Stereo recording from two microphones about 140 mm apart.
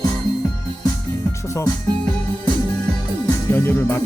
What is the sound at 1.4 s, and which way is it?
Speech, 20° left (ahead or behind).